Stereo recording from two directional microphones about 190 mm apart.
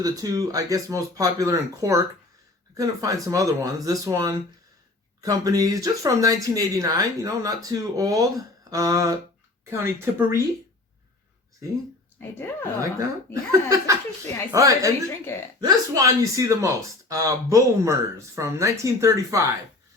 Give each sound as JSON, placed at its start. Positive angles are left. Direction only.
{"t": 0.0, "sound": "speech", "side_deg": -20}
{"t": 12.8, "sound": "speech", "side_deg": -15}